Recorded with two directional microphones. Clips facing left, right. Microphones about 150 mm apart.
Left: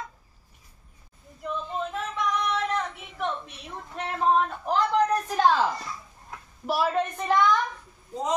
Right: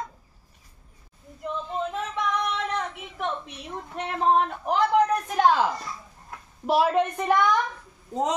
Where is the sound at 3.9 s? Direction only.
15° right (ahead or behind).